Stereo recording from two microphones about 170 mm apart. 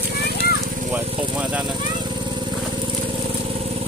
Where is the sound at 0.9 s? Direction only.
10° right (ahead or behind).